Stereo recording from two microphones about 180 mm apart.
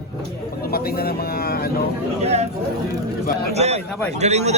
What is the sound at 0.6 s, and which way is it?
Speech, 60° left (ahead or behind).